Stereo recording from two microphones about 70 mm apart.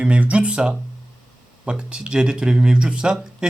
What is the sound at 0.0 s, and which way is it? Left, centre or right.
Speech, centre.